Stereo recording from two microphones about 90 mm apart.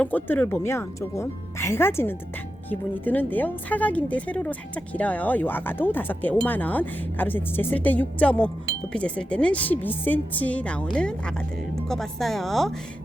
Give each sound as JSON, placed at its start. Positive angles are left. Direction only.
{"t": 0.0, "sound": "a woman's voice", "side_deg": 20}